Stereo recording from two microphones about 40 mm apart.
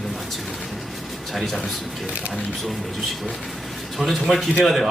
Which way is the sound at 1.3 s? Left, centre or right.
Centre.